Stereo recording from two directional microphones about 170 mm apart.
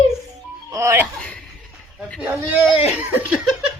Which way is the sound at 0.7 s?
15° right (ahead or behind).